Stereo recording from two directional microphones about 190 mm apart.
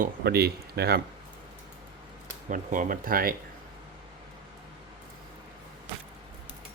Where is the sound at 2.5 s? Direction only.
45° right (ahead or behind).